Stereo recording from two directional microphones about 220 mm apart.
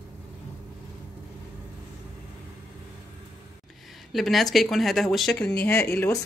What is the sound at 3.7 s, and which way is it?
Speech, centre (ahead or behind).